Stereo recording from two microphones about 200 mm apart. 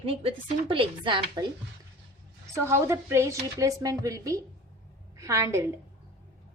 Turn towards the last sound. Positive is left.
turn(degrees=-15)  # may be behind; listen again after turning